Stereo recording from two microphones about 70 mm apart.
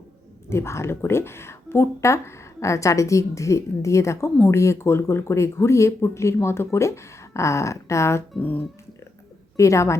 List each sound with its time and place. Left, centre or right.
0.5 s speech: left
8.4 s speech: left
9.6 s speech: left